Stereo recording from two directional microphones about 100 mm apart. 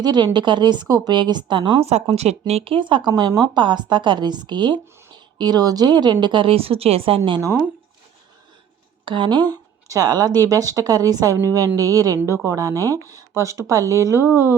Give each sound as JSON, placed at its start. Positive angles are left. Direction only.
{"t": 0.0, "sound": "a woman's voice", "side_deg": -45}
{"t": 1.8, "sound": "a woman's voice", "side_deg": -90}
{"t": 9.0, "sound": "speech", "side_deg": -50}